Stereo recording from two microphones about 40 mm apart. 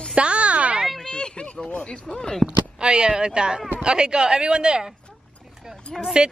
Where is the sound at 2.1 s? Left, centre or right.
Centre.